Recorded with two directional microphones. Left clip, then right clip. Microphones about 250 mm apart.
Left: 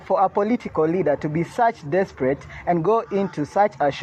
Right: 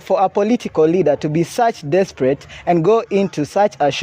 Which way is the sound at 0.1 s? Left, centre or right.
Right.